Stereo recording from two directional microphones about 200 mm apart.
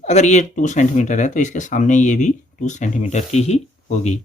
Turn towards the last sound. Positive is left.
turn(degrees=35)  # may be behind; listen again after turning